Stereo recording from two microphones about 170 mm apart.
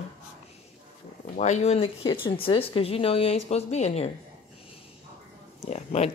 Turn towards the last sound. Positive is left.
turn(degrees=40)  # may be behind; listen again after turning